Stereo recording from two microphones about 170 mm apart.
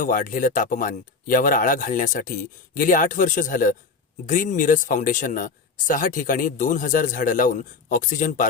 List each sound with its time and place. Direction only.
0.0 s speech: 50° left (ahead or behind)